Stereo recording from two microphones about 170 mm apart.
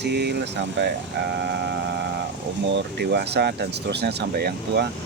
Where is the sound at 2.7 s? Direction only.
75° right (ahead or behind).